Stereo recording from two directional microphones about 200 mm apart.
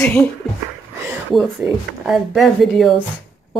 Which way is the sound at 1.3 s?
Centre (ahead or behind).